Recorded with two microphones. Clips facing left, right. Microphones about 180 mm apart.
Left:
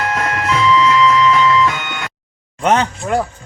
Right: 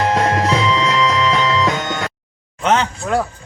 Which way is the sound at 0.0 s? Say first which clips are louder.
Right 4 dB; 30° right (ahead or behind).